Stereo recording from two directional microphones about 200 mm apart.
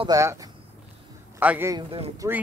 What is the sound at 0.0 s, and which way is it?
Speech, 15° right (ahead or behind).